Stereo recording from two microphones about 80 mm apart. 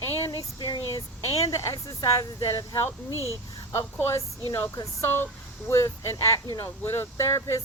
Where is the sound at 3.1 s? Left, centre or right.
Right.